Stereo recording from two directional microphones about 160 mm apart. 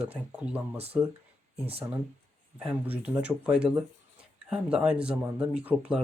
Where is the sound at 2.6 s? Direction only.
10° right (ahead or behind).